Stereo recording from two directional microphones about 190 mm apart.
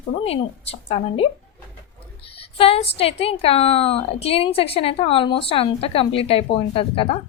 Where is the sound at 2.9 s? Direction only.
30° left (ahead or behind).